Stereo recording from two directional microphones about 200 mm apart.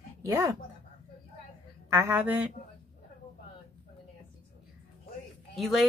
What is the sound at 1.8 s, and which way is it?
Speech, 10° right (ahead or behind).